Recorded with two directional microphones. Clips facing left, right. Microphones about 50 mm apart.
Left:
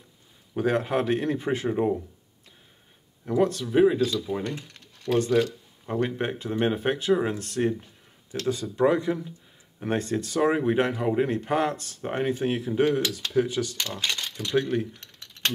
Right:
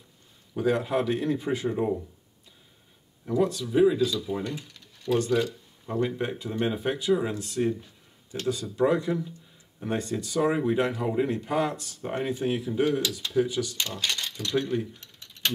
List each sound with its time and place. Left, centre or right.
0.6 s speech: left
3.3 s speech: left
8.5 s speech: left
9.8 s speech: left